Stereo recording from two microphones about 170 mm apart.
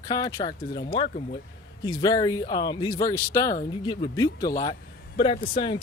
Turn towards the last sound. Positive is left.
turn(degrees=30)  # may be behind; listen again after turning